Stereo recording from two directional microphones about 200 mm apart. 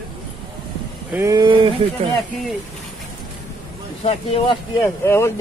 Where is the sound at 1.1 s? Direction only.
15° right (ahead or behind).